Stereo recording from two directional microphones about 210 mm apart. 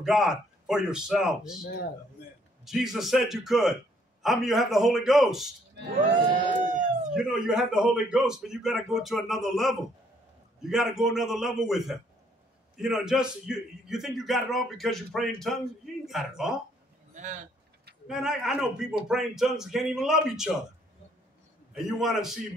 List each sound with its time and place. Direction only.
0.0 s a man's voice: centre (ahead or behind)
1.6 s a man's voice: 55° left (ahead or behind)
2.6 s a man's voice: centre (ahead or behind)
7.2 s a man's voice: centre (ahead or behind)
17.1 s speech: 35° right (ahead or behind)
18.0 s a man's voice: centre (ahead or behind)
21.7 s a man's voice: centre (ahead or behind)